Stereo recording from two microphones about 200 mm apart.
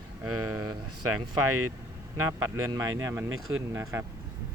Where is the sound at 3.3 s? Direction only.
90° right.